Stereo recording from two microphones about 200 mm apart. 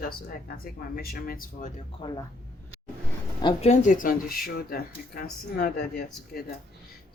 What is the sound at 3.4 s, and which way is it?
Speech, 30° left (ahead or behind).